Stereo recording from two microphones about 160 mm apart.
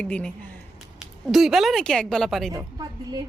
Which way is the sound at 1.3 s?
Centre (ahead or behind).